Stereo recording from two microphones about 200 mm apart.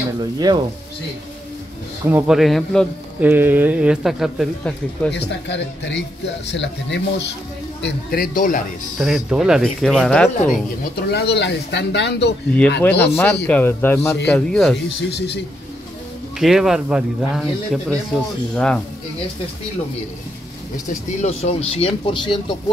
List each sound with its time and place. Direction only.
0.4 s speech: 20° right (ahead or behind)
2.0 s speech: 5° right (ahead or behind)
3.2 s speech: 10° right (ahead or behind)
5.1 s speech: 60° left (ahead or behind)
7.8 s speech: 50° left (ahead or behind)
8.9 s speech: centre (ahead or behind)
10.4 s speech: 40° left (ahead or behind)
11.3 s speech: 60° left (ahead or behind)
12.8 s speech: 10° left (ahead or behind)
15.0 s speech: 55° left (ahead or behind)
16.3 s speech: centre (ahead or behind)
21.2 s speech: 35° left (ahead or behind)